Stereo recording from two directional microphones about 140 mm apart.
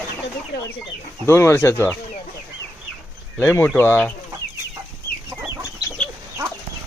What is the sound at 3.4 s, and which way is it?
Speech, 15° left (ahead or behind).